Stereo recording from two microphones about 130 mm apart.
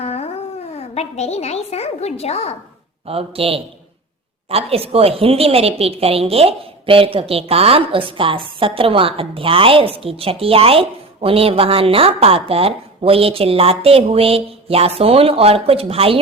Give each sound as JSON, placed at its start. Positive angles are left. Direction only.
{"t": 0.0, "sound": "a sound", "side_deg": 55}
{"t": 0.7, "sound": "a woman's voice", "side_deg": 55}
{"t": 3.1, "sound": "a woman's voice", "side_deg": -50}